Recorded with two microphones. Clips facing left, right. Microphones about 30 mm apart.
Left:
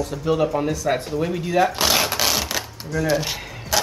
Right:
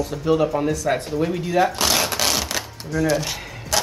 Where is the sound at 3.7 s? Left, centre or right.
Centre.